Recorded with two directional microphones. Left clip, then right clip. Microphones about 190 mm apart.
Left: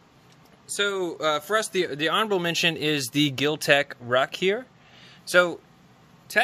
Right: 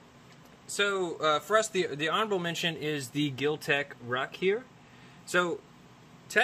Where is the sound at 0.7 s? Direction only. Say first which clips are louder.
Left 3 dB; 45° left (ahead or behind); by 4.6 s 70° left (ahead or behind).